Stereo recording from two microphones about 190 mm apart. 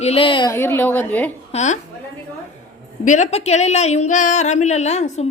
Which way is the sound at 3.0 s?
40° left (ahead or behind).